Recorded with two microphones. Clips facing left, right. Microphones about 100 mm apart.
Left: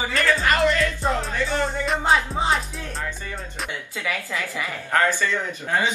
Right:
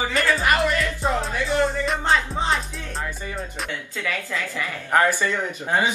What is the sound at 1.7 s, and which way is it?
Music, centre (ahead or behind).